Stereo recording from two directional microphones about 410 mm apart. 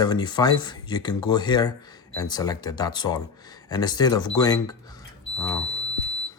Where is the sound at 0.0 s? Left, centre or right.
Centre.